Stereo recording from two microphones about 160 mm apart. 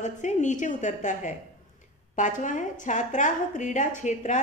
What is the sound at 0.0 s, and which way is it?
Speech, 50° left (ahead or behind).